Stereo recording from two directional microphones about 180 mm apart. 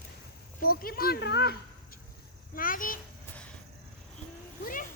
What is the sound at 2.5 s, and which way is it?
Speech, 50° left (ahead or behind).